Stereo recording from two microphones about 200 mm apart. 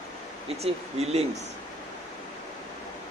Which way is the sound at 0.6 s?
30° right (ahead or behind).